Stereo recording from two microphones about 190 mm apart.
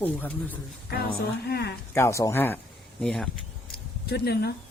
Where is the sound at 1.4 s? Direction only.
55° left (ahead or behind).